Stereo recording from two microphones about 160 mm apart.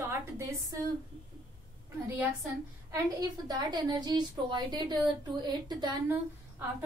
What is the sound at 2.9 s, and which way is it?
A woman's voice, 25° right (ahead or behind).